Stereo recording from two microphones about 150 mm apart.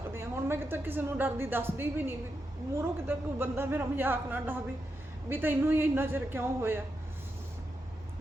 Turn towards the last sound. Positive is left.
turn(degrees=-15)  # may be behind; listen again after turning